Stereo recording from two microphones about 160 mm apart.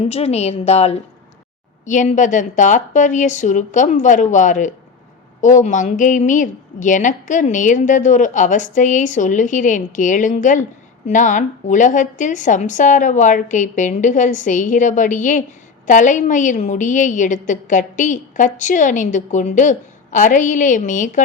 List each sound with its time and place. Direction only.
0.0 s a woman's voice: 40° left (ahead or behind)